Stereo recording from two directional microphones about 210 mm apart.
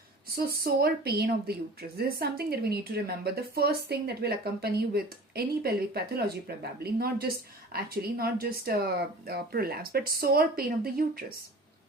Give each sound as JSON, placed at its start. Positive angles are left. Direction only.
{"t": 0.3, "sound": "a woman's voice", "side_deg": -45}